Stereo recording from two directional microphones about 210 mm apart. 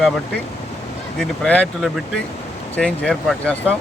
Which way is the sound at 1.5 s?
5° left (ahead or behind).